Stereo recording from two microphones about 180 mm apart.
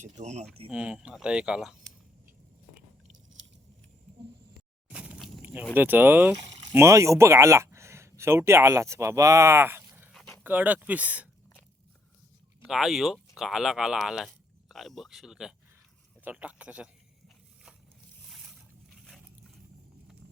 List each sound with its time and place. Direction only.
0.0 s speech: 40° right (ahead or behind)
0.7 s speech: 5° right (ahead or behind)
4.9 s a sound: 5° right (ahead or behind)
5.7 s speech: 10° right (ahead or behind)
10.1 s dog: 5° left (ahead or behind)
10.4 s speech: 10° right (ahead or behind)
12.6 s speech: centre (ahead or behind)
16.2 s a sound: 10° right (ahead or behind)
18.9 s a sound: centre (ahead or behind)